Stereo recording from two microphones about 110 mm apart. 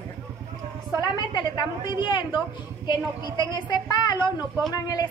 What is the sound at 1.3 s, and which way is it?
A woman's voice, 45° left (ahead or behind).